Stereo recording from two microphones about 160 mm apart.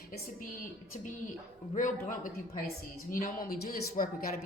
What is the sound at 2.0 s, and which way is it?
Speech, 60° left (ahead or behind).